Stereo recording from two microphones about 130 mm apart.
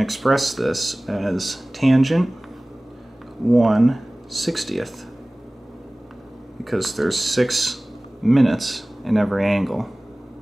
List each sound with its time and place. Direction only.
0.0 s speech: centre (ahead or behind)
3.4 s speech: centre (ahead or behind)
6.6 s speech: centre (ahead or behind)